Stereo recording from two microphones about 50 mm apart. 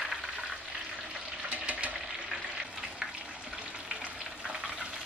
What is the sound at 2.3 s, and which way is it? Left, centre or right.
Frying, centre.